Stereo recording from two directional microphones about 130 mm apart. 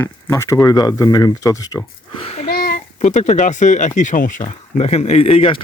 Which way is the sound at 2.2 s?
50° left (ahead or behind).